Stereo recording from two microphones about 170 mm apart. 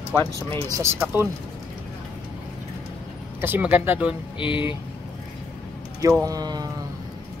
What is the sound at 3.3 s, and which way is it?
Speech, 10° right (ahead or behind).